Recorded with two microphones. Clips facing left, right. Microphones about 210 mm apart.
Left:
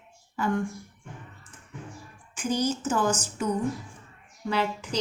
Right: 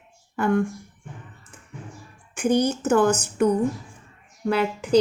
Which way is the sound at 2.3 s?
60° right (ahead or behind).